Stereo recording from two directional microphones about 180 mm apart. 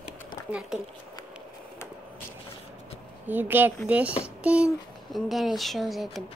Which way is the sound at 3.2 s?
10° right (ahead or behind).